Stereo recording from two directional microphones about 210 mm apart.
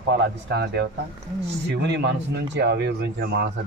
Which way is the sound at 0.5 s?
50° right (ahead or behind).